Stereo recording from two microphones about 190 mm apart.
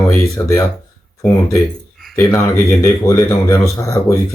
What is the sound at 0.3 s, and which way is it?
Speech, 15° left (ahead or behind).